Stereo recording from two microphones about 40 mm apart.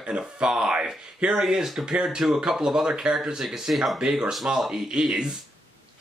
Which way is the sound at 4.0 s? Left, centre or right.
Centre.